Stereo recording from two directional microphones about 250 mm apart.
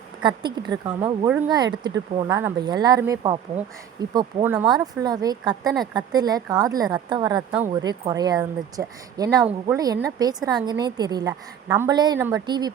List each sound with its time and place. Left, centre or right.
0.2 s speech: centre